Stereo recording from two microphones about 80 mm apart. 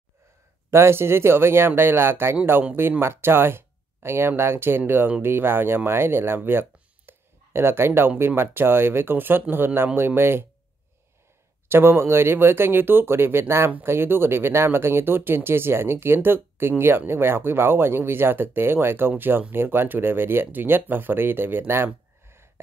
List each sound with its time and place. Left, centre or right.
0.7 s speech: right
7.1 s a sound: right
8.2 s speech: right
11.7 s speech: right